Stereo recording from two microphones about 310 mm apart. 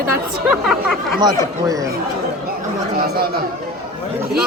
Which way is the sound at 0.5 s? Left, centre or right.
Centre.